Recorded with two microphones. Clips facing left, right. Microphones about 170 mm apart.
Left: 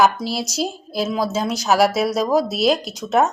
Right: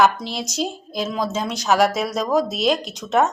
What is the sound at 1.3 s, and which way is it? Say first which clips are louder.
Speech: left 3 dB; 40° left (ahead or behind).